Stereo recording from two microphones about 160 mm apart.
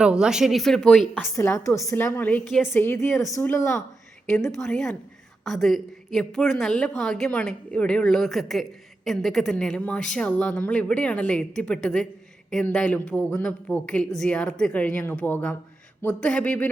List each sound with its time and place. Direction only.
0.0 s a woman's voice: 5° right (ahead or behind)
1.4 s speech: 20° left (ahead or behind)
4.6 s a woman's voice: 5° left (ahead or behind)